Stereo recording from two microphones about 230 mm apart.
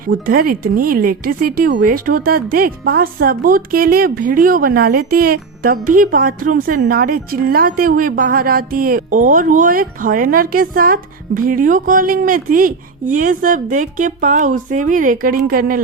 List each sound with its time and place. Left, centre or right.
0.1 s speech: right